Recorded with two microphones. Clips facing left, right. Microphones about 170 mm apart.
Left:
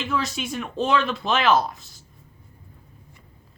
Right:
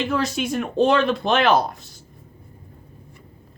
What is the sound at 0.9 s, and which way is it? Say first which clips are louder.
Speech: right 1 dB; 50° right (ahead or behind).